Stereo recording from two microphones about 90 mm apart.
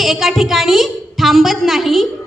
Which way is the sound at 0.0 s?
Centre (ahead or behind).